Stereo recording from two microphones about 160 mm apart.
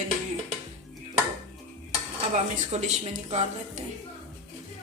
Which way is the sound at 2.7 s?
45° right (ahead or behind).